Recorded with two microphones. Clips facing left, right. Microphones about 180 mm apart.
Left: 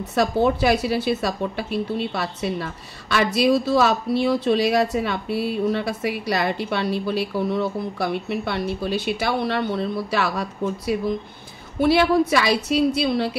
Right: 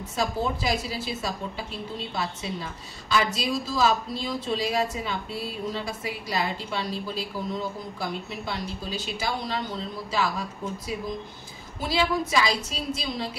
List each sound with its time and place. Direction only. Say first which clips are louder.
0.0 s a woman's voice: left 8 dB; 65° left (ahead or behind)